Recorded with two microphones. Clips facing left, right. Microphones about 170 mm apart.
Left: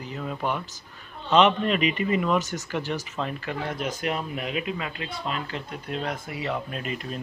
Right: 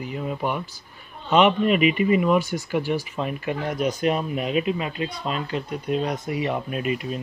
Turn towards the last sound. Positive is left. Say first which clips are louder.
# right 6 dB
turn(degrees=-10)  # may be behind; listen again after turning